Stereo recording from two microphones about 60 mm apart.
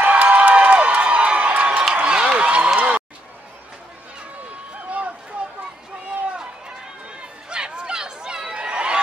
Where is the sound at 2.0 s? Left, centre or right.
Centre.